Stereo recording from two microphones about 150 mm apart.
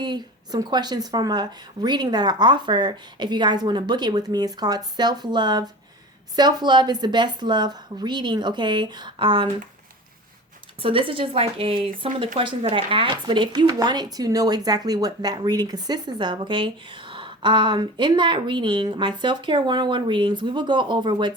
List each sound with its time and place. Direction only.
0.0 s speech: 30° right (ahead or behind)
10.8 s speech: 35° right (ahead or behind)